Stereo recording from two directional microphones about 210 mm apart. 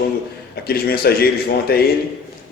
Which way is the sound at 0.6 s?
45° left (ahead or behind).